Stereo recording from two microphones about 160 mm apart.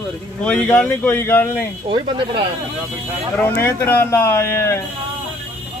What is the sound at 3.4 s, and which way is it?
Speech, 15° left (ahead or behind).